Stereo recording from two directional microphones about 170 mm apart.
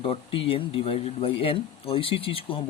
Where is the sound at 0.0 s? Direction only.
30° left (ahead or behind).